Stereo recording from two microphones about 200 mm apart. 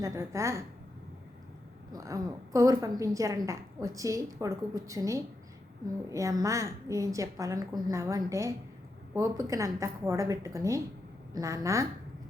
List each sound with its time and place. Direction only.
0.0 s a woman's voice: 15° right (ahead or behind)
1.9 s a woman's voice: 15° right (ahead or behind)